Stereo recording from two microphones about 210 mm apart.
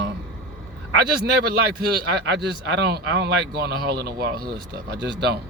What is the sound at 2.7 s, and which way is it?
Speech, 55° right (ahead or behind).